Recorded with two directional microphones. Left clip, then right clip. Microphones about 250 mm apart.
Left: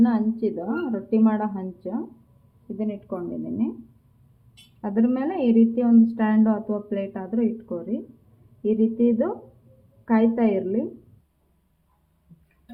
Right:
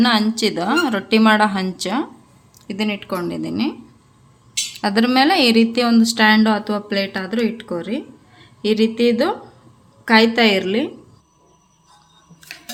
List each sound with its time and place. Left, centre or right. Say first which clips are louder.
0.4 s a woman's voice: right 9 dB; right
2.7 s a woman's voice: right 8 dB; right
4.8 s a woman's voice: right 9 dB; right